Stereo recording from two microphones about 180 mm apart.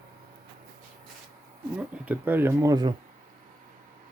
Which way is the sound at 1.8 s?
10° right (ahead or behind).